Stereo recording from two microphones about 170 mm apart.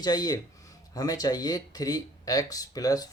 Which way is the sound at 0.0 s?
25° left (ahead or behind).